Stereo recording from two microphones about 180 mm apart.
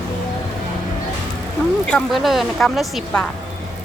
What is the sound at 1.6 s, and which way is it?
A woman's voice, 5° left (ahead or behind).